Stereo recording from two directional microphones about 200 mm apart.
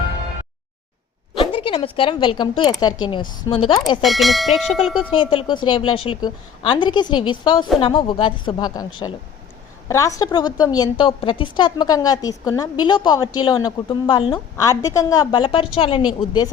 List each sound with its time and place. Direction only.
1.4 s a woman's voice: 25° left (ahead or behind)
4.0 s speech: centre (ahead or behind)
5.1 s a woman's voice: 25° left (ahead or behind)